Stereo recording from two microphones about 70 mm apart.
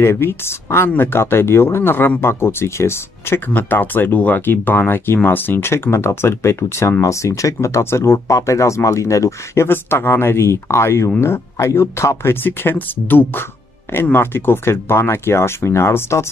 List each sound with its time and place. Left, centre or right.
0.0 s speech: left
9.7 s speech: left